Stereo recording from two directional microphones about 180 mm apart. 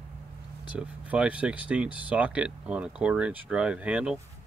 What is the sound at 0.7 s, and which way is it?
Speech, 5° right (ahead or behind).